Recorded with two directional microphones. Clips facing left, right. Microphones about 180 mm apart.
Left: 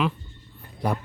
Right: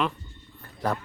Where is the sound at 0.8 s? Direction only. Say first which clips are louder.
Left 1 dB; 15° left (ahead or behind).